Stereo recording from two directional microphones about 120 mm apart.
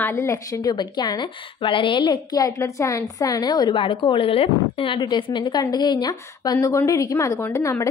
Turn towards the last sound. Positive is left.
turn(degrees=25)  # may be behind; listen again after turning